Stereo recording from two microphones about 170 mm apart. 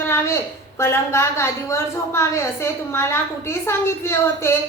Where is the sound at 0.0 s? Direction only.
15° left (ahead or behind).